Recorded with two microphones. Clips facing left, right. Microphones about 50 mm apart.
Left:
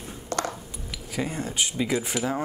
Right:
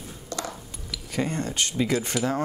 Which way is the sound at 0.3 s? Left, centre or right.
Left.